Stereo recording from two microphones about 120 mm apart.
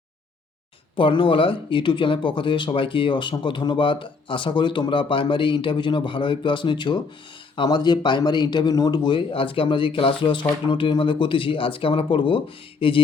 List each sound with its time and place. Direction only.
0.9 s speech: 45° left (ahead or behind)